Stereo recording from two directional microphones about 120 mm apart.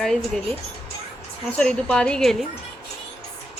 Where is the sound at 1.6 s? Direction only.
5° left (ahead or behind).